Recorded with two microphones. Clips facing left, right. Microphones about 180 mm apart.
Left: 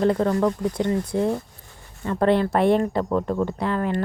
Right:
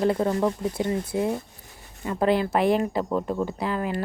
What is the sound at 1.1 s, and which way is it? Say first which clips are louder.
Speech: left 2 dB; 30° left (ahead or behind).